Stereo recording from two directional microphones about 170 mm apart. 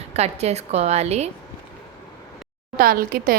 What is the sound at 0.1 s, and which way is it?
A woman's voice, 40° right (ahead or behind).